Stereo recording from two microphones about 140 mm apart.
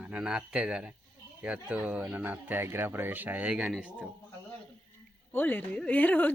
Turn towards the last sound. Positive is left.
turn(degrees=10)  # may be behind; listen again after turning